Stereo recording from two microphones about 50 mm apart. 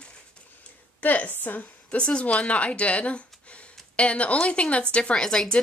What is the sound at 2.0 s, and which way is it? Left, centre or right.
Speech, left.